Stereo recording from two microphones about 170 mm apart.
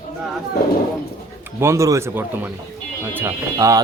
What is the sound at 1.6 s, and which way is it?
Speech, 15° right (ahead or behind).